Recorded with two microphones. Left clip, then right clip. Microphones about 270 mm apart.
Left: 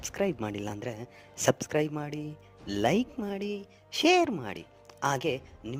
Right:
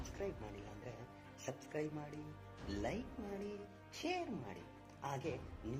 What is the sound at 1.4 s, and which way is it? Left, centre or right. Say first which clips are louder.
Speech: left 17 dB; left.